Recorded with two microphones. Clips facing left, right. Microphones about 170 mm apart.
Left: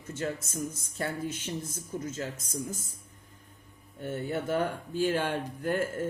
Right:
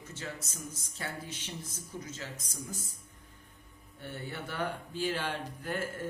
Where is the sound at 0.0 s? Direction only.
50° left (ahead or behind).